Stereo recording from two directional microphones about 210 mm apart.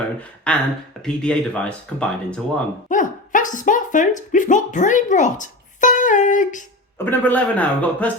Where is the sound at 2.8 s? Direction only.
40° left (ahead or behind).